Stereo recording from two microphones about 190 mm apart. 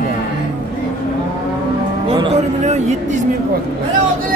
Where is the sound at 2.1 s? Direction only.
30° right (ahead or behind).